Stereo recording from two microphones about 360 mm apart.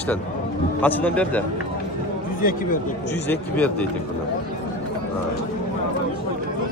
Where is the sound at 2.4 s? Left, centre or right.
Left.